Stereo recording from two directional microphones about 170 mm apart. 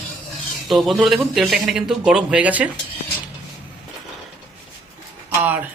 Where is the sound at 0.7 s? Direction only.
Centre (ahead or behind).